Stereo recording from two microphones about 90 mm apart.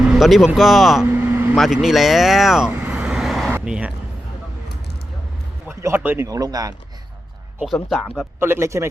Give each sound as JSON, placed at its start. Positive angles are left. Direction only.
{"t": 0.0, "sound": "speech", "side_deg": -5}
{"t": 1.0, "sound": "vehicle", "side_deg": -20}
{"t": 1.5, "sound": "speech", "side_deg": -5}
{"t": 2.9, "sound": "vehicle", "side_deg": -5}
{"t": 3.6, "sound": "speech", "side_deg": -10}
{"t": 6.0, "sound": "speech", "side_deg": -20}
{"t": 6.2, "sound": "speech", "side_deg": -40}
{"t": 7.6, "sound": "speech", "side_deg": 0}
{"t": 8.4, "sound": "speech", "side_deg": -30}